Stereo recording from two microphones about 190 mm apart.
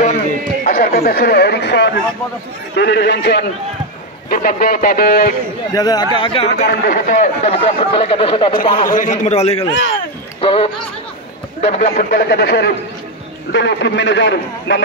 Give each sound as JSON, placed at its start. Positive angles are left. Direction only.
{"t": 0.7, "sound": "speech", "side_deg": 50}
{"t": 4.3, "sound": "speech", "side_deg": 45}
{"t": 5.7, "sound": "speech", "side_deg": 20}
{"t": 6.5, "sound": "speech", "side_deg": 55}
{"t": 8.8, "sound": "a man's voice", "side_deg": 45}